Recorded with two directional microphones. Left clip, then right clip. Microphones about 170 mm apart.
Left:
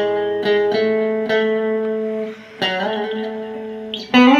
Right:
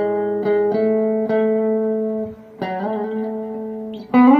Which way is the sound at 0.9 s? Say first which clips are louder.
Left 1 dB; 20° left (ahead or behind).